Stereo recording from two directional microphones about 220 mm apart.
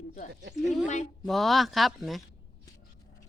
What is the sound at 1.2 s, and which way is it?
Speech, centre (ahead or behind).